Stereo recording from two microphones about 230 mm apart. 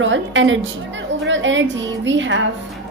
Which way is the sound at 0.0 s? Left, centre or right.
Right.